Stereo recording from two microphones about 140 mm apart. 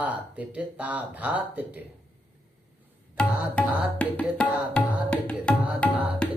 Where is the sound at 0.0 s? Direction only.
10° right (ahead or behind).